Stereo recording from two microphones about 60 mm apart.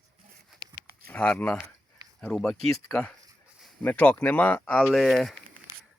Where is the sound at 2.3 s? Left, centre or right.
Centre.